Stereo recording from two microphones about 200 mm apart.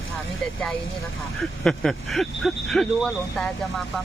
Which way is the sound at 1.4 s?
Centre (ahead or behind).